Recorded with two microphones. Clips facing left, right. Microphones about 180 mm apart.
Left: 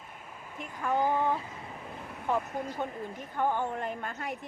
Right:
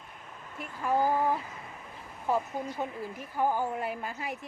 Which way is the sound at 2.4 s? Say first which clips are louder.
Even; 55° left (ahead or behind).